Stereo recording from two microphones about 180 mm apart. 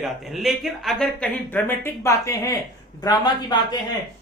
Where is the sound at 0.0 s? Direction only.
Centre (ahead or behind).